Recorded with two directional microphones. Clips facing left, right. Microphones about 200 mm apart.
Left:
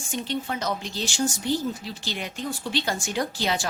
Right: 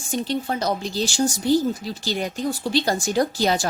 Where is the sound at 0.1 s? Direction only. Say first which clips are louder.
Right 5 dB; 35° right (ahead or behind).